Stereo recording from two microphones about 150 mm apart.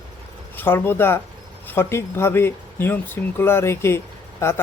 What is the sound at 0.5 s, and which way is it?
Speech, 15° left (ahead or behind).